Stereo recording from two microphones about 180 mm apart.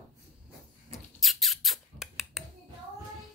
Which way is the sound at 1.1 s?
Centre (ahead or behind).